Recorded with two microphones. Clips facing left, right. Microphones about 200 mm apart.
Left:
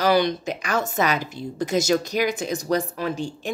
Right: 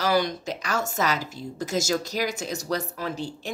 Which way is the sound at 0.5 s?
55° left (ahead or behind).